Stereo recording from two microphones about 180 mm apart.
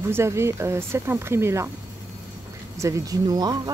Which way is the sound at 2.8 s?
20° right (ahead or behind).